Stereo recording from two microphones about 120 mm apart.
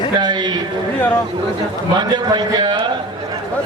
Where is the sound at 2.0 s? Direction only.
35° right (ahead or behind).